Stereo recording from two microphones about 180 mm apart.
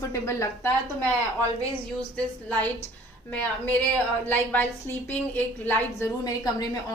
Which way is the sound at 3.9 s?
10° left (ahead or behind).